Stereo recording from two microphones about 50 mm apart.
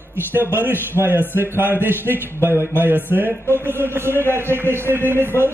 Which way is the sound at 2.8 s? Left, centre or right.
Right.